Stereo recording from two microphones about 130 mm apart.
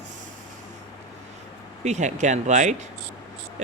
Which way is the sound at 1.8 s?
65° right (ahead or behind).